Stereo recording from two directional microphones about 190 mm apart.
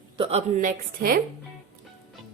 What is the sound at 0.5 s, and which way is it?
Speech, 50° right (ahead or behind).